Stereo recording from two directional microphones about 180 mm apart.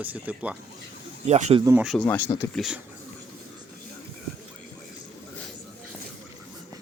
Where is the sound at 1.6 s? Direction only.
5° right (ahead or behind).